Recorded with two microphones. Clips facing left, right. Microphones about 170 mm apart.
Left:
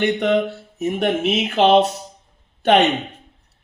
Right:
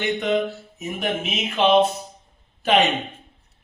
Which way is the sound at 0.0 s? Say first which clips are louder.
Left 4 dB; 65° left (ahead or behind).